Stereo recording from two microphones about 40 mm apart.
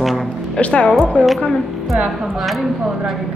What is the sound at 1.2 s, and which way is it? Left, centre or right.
Speech, left.